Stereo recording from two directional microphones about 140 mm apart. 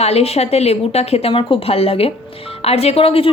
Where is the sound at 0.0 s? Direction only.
50° left (ahead or behind).